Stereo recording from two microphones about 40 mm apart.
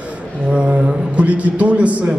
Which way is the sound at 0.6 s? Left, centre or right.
Right.